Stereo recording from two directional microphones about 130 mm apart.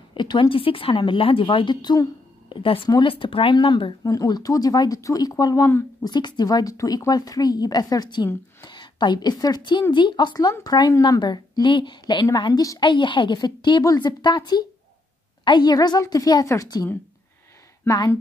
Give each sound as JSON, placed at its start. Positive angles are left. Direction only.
{"t": 0.1, "sound": "a woman's voice", "side_deg": 40}
{"t": 2.5, "sound": "a woman's voice", "side_deg": 45}
{"t": 4.0, "sound": "a woman's voice", "side_deg": 30}
{"t": 12.8, "sound": "a woman's voice", "side_deg": 40}